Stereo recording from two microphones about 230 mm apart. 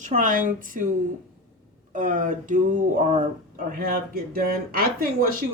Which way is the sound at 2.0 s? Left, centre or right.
Right.